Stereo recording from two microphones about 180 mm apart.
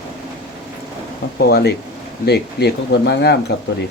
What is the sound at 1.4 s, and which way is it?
Speech, 60° left (ahead or behind).